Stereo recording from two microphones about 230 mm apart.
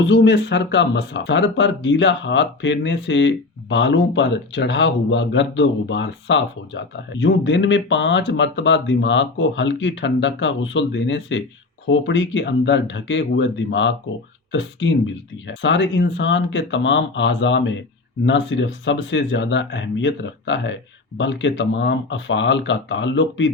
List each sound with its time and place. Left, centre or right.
0.0 s speech: left